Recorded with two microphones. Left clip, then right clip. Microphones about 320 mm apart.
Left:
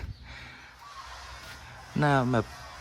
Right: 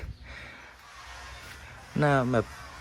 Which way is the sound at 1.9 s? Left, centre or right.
Centre.